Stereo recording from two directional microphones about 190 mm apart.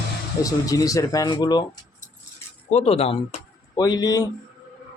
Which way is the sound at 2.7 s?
35° left (ahead or behind).